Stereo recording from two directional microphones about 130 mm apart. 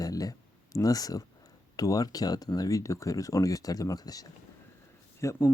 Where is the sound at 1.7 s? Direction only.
25° left (ahead or behind).